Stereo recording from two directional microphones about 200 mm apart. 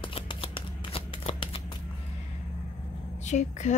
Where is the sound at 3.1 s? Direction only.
35° left (ahead or behind).